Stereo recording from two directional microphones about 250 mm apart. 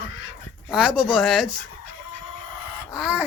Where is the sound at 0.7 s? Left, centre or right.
Centre.